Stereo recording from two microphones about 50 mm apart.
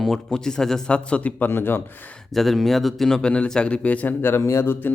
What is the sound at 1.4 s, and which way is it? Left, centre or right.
Speech, left.